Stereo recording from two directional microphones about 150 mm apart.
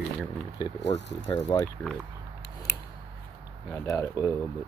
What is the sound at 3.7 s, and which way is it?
Speech, 20° left (ahead or behind).